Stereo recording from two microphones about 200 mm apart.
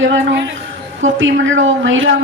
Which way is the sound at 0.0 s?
65° right (ahead or behind).